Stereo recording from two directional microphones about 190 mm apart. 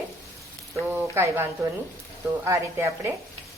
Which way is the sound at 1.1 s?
15° right (ahead or behind).